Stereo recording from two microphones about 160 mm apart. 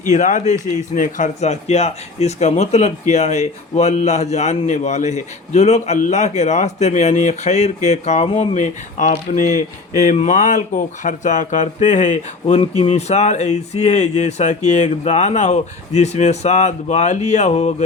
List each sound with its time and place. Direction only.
0.0 s speech: 50° left (ahead or behind)